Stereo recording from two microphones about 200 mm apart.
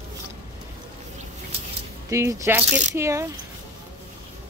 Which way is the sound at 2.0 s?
15° right (ahead or behind).